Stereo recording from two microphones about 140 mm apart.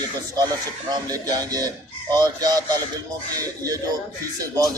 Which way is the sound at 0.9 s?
30° right (ahead or behind).